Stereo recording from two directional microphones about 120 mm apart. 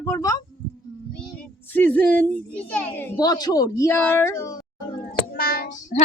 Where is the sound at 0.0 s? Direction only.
30° left (ahead or behind).